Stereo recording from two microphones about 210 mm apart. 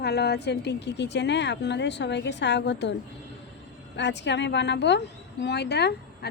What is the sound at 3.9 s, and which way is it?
A woman's voice, 55° left (ahead or behind).